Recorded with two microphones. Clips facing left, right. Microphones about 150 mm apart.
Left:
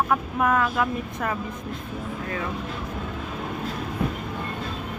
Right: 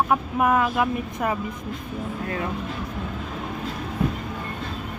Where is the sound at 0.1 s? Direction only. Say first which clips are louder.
Right 2 dB; 20° right (ahead or behind).